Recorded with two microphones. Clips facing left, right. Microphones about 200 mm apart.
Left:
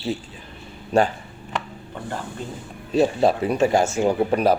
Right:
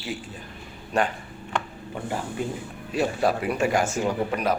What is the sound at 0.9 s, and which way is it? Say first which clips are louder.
Speech: left 6 dB; 30° left (ahead or behind).